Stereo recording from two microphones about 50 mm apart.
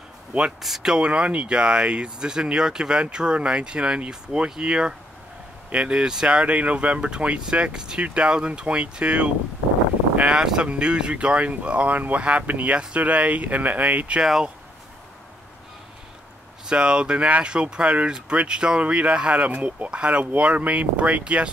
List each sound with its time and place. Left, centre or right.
0.6 s speech: centre
0.9 s speech: right
16.6 s speech: centre